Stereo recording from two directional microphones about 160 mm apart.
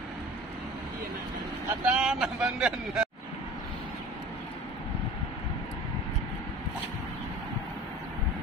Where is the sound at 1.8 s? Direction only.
5° right (ahead or behind).